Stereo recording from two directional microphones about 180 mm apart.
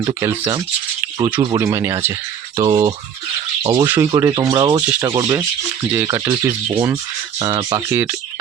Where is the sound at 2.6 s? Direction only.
25° right (ahead or behind).